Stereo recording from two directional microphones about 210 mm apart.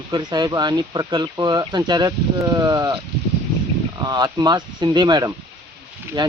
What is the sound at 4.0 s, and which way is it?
Speech, 20° right (ahead or behind).